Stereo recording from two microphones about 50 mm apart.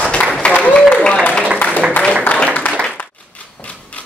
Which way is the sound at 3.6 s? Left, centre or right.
Left.